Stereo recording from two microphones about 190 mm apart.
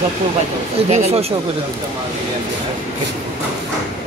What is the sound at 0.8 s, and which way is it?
Speech, 35° right (ahead or behind).